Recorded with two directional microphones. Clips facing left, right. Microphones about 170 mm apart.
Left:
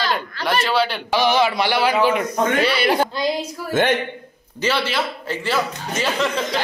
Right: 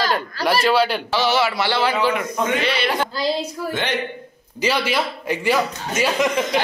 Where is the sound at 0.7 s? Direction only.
10° right (ahead or behind).